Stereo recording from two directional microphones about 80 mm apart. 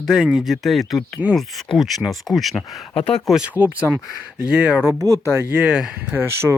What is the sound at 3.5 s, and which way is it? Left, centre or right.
Speech, right.